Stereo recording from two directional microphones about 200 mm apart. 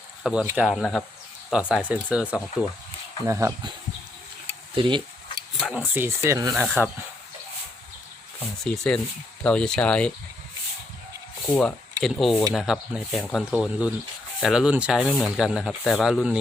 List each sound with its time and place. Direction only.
0.2 s speech: centre (ahead or behind)
3.2 s speech: 15° right (ahead or behind)
4.7 s a sound: 25° right (ahead or behind)
5.5 s speech: 5° right (ahead or behind)
6.7 s speech: 10° left (ahead or behind)
8.6 s speech: 5° left (ahead or behind)
11.4 s speech: 10° left (ahead or behind)